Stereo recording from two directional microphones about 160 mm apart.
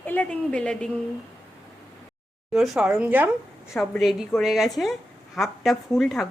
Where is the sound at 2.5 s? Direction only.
Centre (ahead or behind).